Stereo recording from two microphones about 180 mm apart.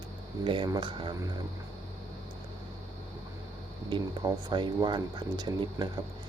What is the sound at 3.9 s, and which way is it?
Speech, 20° right (ahead or behind).